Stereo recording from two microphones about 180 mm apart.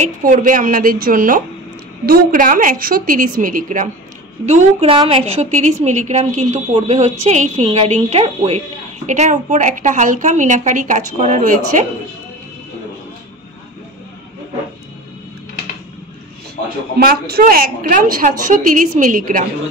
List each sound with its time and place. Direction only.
0.0 s a woman's voice: 50° right (ahead or behind)
4.5 s a woman's voice: 35° right (ahead or behind)
17.0 s a woman's voice: 55° right (ahead or behind)